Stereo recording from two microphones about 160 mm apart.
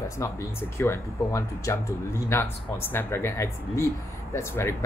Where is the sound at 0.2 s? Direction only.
15° left (ahead or behind).